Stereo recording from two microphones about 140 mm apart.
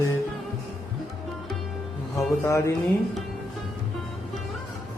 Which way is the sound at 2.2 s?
20° left (ahead or behind).